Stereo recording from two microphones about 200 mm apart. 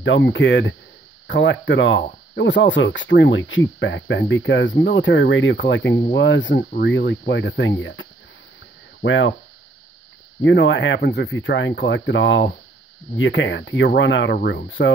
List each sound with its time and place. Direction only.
0.0 s speech: 65° left (ahead or behind)
10.4 s speech: 65° left (ahead or behind)